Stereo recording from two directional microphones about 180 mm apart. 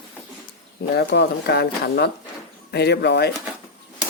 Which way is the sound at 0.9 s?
65° left (ahead or behind).